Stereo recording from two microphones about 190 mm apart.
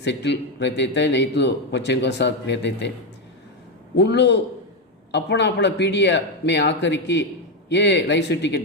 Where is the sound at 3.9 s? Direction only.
65° left (ahead or behind).